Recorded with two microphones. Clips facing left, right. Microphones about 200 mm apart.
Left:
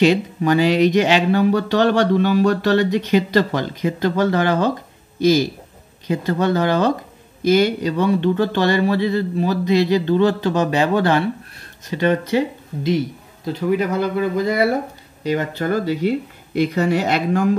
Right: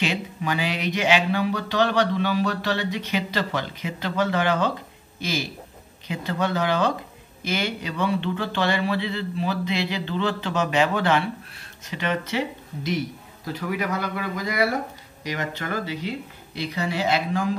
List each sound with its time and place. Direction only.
0.0 s speech: 45° left (ahead or behind)
13.5 s speech: 25° left (ahead or behind); by 17.6 s 50° left (ahead or behind)